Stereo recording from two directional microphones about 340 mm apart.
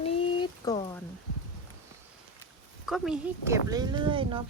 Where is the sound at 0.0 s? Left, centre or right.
Centre.